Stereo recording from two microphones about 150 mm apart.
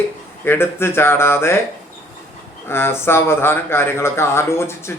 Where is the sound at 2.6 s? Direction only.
15° left (ahead or behind).